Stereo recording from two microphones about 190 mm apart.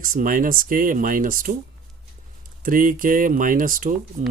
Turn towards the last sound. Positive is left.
turn(degrees=-45)  # may be behind; listen again after turning